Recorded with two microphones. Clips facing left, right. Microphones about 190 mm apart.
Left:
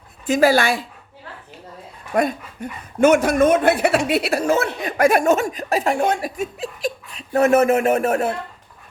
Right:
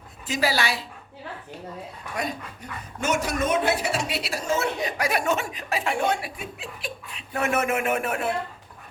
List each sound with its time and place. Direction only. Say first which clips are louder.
0.3 s a woman's voice: left 9 dB; 50° left (ahead or behind)
2.1 s a woman's voice: left 11 dB; 55° left (ahead or behind)